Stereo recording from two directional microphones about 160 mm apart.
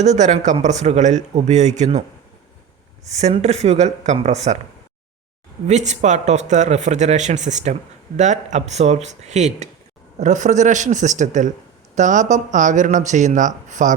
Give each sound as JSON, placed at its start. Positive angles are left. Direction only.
{"t": 0.0, "sound": "speech", "side_deg": -45}
{"t": 3.1, "sound": "speech", "side_deg": -45}
{"t": 5.6, "sound": "speech", "side_deg": -45}